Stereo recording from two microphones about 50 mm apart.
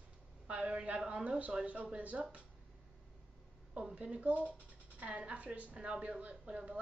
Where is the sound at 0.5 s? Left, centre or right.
Right.